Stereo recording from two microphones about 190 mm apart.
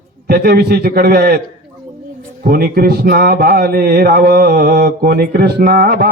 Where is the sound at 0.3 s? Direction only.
55° right (ahead or behind).